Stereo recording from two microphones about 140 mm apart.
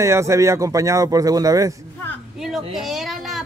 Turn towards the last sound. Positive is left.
turn(degrees=0)  # may be behind; listen again after turning